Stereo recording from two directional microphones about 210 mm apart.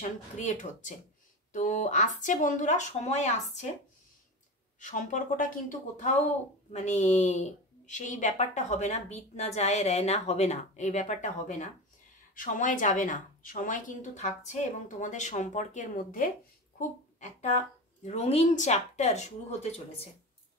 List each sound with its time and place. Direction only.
0.0 s a woman's voice: 35° left (ahead or behind)
4.7 s a woman's voice: 35° left (ahead or behind)